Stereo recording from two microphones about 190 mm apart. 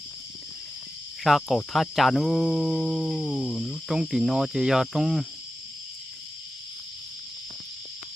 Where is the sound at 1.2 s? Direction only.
Centre (ahead or behind).